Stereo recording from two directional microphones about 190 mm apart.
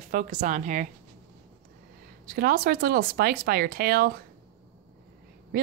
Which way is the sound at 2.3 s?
50° right (ahead or behind).